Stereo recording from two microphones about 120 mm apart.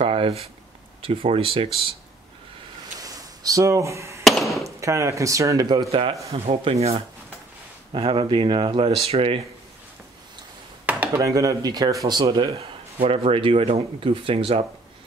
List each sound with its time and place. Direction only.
0.0 s a sound: 50° right (ahead or behind)
1.0 s speech: 50° right (ahead or behind)
3.0 s a sound: 30° right (ahead or behind)
4.2 s a sound: centre (ahead or behind)
4.6 s speech: 25° right (ahead or behind)
5.9 s speech: 50° right (ahead or behind)
7.9 s speech: 45° right (ahead or behind)
11.1 s speech: 30° right (ahead or behind)
12.5 s speech: 55° right (ahead or behind)